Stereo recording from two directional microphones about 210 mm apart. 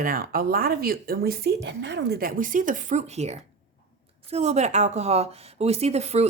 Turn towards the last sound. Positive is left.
turn(degrees=-30)  # may be behind; listen again after turning